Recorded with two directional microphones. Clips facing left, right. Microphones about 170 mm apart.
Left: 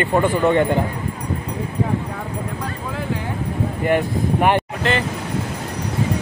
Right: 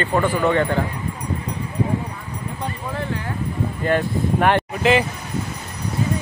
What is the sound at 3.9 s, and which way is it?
Speech, 15° left (ahead or behind).